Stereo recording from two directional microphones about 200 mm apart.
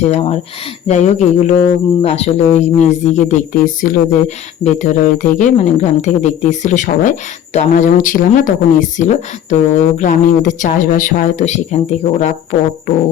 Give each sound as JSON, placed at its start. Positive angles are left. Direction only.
{"t": 0.1, "sound": "speech", "side_deg": 30}